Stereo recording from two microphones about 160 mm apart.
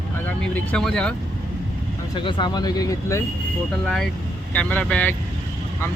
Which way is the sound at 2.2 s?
30° left (ahead or behind).